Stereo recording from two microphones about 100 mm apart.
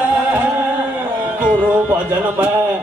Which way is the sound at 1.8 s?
20° right (ahead or behind).